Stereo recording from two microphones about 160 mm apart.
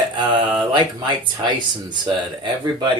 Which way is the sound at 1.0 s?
30° right (ahead or behind).